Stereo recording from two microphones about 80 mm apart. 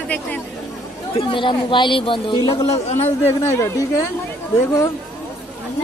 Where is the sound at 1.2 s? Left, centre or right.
Left.